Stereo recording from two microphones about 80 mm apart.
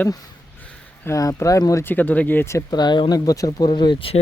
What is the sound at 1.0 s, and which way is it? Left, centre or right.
Speech, left.